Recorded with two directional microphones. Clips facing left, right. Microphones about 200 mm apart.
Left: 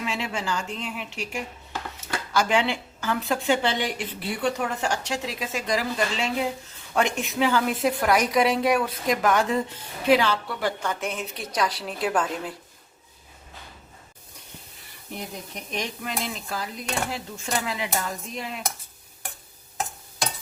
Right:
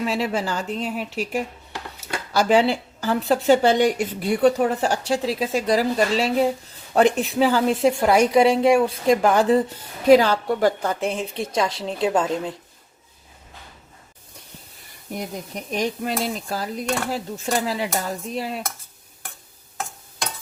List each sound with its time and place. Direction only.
0.0 s a woman's voice: 40° right (ahead or behind)
2.3 s a woman's voice: 35° right (ahead or behind)
15.7 s a woman's voice: 35° right (ahead or behind)